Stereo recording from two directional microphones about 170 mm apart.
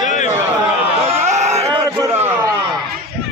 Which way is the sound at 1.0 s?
35° right (ahead or behind).